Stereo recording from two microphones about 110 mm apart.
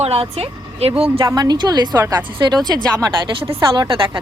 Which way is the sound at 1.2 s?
35° right (ahead or behind).